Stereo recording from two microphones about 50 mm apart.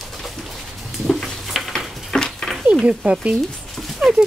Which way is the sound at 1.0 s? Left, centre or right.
Centre.